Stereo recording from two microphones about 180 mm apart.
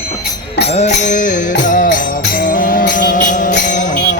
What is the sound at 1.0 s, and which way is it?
Music, 45° left (ahead or behind).